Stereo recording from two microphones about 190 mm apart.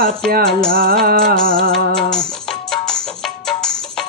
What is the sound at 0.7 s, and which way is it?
Music, 50° right (ahead or behind).